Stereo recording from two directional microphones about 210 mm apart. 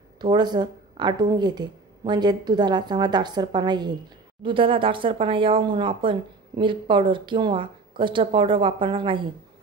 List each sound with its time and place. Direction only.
0.2 s a woman's voice: 20° right (ahead or behind)